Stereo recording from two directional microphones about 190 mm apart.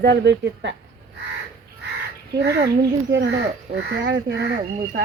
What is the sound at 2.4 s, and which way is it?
Speech, 60° right (ahead or behind).